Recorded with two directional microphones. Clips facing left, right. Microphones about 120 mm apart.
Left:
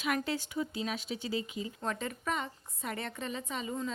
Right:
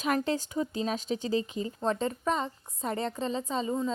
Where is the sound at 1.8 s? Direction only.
30° right (ahead or behind).